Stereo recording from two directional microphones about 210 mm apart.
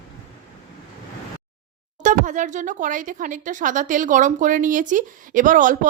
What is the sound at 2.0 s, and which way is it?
Speech, 35° right (ahead or behind).